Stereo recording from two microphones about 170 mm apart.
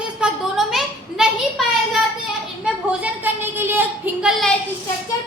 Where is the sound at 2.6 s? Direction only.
10° right (ahead or behind).